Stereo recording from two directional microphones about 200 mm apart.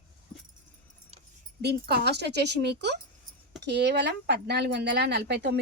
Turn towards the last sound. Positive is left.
turn(degrees=-55)  # may be behind; listen again after turning